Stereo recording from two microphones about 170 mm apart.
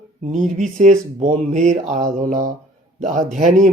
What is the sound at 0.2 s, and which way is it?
Speech, 45° right (ahead or behind).